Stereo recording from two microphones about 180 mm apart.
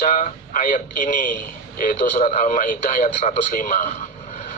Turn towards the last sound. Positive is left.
turn(degrees=45)  # may be behind; listen again after turning